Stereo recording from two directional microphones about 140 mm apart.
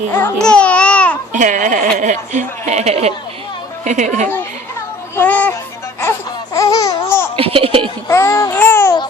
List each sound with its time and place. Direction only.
0.3 s babbling: 5° left (ahead or behind)
1.3 s a sound: 65° right (ahead or behind)
2.0 s speech: 60° right (ahead or behind)
3.8 s speech: 60° right (ahead or behind)
5.1 s speech: 10° left (ahead or behind)
6.0 s laughter: 20° left (ahead or behind)
7.3 s speech: 40° right (ahead or behind)
8.0 s babbling: 20° left (ahead or behind)